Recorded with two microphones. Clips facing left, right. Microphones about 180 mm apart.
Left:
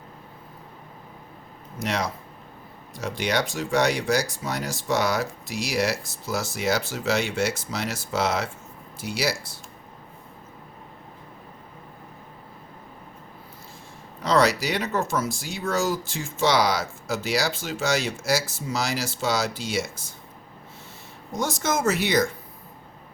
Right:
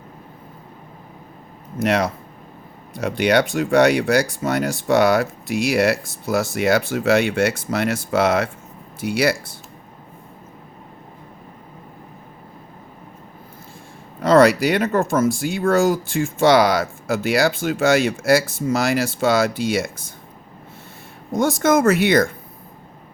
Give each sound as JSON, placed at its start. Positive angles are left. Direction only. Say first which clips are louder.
{"t": 1.8, "sound": "speech", "louder": "right 8 dB", "side_deg": -55}
{"t": 14.2, "sound": "speech", "louder": "right 8 dB", "side_deg": -55}
{"t": 21.3, "sound": "speech", "louder": "right 9 dB", "side_deg": -55}